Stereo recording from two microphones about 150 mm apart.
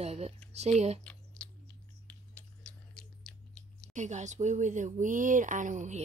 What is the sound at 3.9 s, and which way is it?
Speech, 55° right (ahead or behind).